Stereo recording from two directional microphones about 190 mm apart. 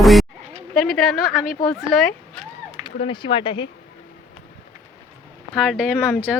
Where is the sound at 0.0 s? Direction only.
Centre (ahead or behind).